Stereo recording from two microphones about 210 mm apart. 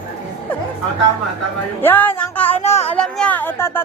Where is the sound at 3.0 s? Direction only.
5° left (ahead or behind).